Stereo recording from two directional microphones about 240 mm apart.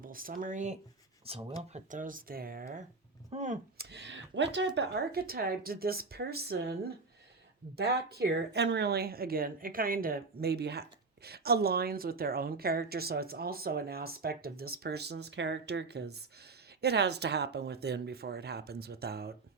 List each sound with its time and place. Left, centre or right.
0.0 s speech: right
3.8 s speech: right